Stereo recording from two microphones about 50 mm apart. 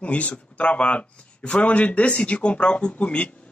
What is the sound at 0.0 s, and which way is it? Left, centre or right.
A man's voice, left.